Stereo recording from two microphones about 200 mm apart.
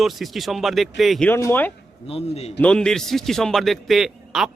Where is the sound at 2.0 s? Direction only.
30° left (ahead or behind).